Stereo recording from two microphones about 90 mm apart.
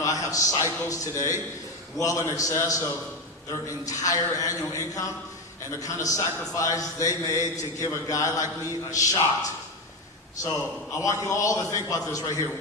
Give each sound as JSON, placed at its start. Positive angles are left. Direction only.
{"t": 0.0, "sound": "a man's voice", "side_deg": 40}
{"t": 11.0, "sound": "a man's voice", "side_deg": 40}